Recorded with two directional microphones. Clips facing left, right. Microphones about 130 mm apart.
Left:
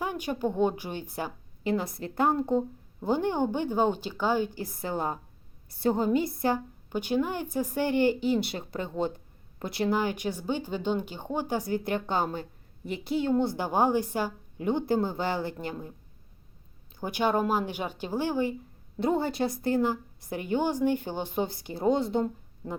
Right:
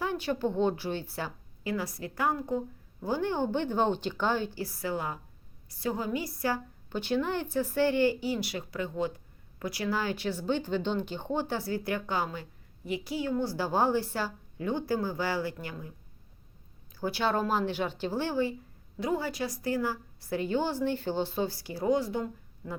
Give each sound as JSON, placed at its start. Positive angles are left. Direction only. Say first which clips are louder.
{"t": 0.0, "sound": "a woman's voice", "louder": "even", "side_deg": 15}
{"t": 4.9, "sound": "a woman's voice", "louder": "left 4 dB", "side_deg": 35}
{"t": 12.2, "sound": "speech", "louder": "left 4 dB", "side_deg": 45}
{"t": 13.1, "sound": "a woman's voice", "louder": "left 6 dB", "side_deg": 25}
{"t": 16.9, "sound": "a woman's voice", "louder": "left 2 dB", "side_deg": 15}
{"t": 19.0, "sound": "a woman's voice", "louder": "left 4 dB", "side_deg": 25}